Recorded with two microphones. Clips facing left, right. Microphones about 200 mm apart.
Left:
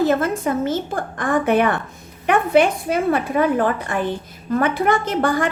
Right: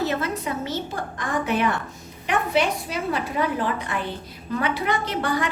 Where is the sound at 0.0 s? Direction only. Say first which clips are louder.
Left 7 dB; 50° left (ahead or behind).